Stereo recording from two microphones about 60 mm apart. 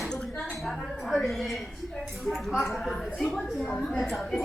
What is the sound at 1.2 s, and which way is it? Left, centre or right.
A woman's voice, centre.